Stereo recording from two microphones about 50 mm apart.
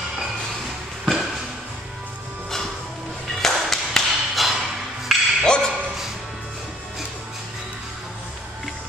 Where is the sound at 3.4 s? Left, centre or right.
Centre.